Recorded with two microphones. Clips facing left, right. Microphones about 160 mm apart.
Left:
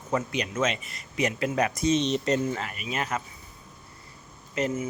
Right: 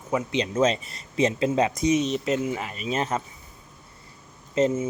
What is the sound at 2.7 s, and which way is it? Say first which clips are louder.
Speech: right 4 dB; 30° right (ahead or behind).